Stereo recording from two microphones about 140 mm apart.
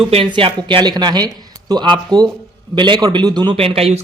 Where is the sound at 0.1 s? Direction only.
40° right (ahead or behind).